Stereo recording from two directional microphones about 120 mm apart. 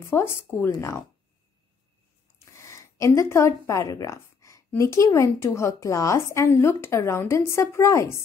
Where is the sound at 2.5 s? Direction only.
25° left (ahead or behind).